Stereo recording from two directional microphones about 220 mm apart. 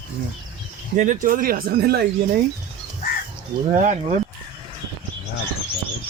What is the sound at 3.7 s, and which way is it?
Speech, 35° right (ahead or behind).